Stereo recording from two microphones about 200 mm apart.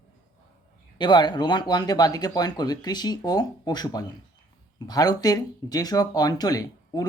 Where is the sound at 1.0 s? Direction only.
20° left (ahead or behind).